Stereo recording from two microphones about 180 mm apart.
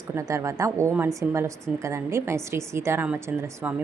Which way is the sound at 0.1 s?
15° right (ahead or behind).